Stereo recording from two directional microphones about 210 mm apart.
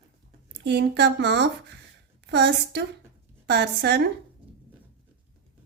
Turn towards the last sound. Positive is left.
turn(degrees=-50)  # may be behind; listen again after turning